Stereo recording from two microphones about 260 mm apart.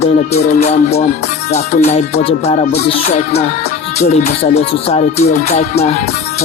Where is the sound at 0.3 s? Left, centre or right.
Left.